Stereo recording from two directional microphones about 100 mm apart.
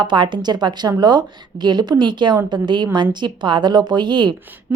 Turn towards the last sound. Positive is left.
turn(degrees=-50)  # may be behind; listen again after turning